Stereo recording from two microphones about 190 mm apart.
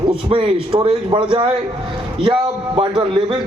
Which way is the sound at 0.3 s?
25° right (ahead or behind).